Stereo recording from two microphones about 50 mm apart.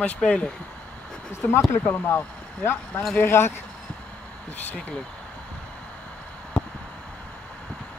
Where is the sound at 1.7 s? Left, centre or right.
Left.